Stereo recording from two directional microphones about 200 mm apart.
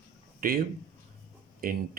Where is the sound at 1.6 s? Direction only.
50° right (ahead or behind).